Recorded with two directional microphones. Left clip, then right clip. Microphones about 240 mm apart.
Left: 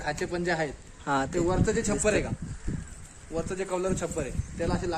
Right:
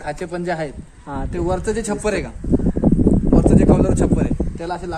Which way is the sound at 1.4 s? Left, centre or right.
Right.